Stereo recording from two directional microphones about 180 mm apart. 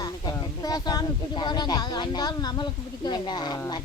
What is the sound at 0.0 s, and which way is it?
Speech, 20° left (ahead or behind).